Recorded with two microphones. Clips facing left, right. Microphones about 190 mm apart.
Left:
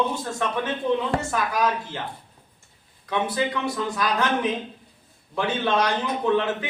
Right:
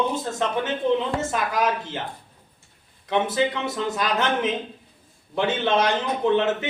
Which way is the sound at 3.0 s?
20° right (ahead or behind).